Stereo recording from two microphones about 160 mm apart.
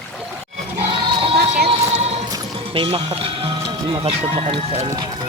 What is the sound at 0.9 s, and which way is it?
Music, 30° right (ahead or behind).